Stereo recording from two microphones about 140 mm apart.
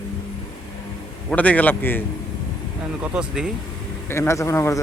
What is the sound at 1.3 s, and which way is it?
Speech, 10° left (ahead or behind).